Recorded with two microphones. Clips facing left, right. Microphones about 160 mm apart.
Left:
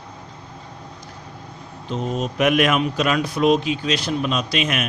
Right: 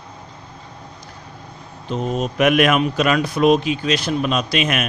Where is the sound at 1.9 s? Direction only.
60° right (ahead or behind).